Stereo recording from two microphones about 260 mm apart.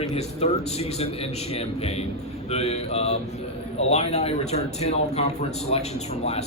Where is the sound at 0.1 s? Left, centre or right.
Left.